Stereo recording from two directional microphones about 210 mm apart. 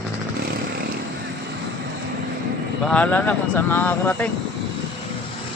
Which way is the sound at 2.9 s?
5° left (ahead or behind).